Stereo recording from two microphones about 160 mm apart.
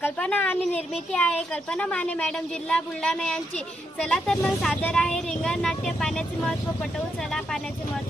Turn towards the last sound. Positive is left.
turn(degrees=5)  # may be behind; listen again after turning